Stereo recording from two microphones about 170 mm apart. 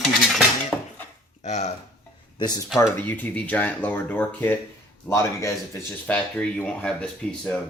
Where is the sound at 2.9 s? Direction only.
10° left (ahead or behind).